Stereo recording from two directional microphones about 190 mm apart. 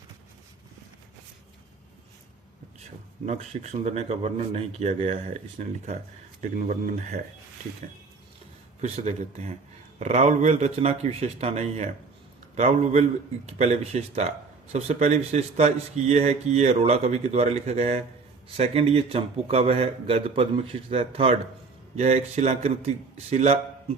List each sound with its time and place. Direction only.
3.2 s speech: 35° right (ahead or behind)
6.4 s speech: 45° right (ahead or behind)
8.8 s speech: 35° right (ahead or behind)